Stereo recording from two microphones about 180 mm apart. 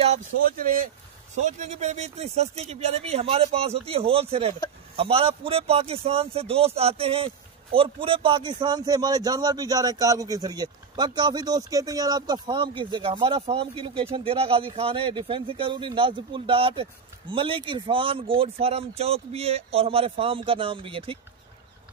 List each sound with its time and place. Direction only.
0.4 s a man's voice: 50° right (ahead or behind); by 21.2 s 30° right (ahead or behind)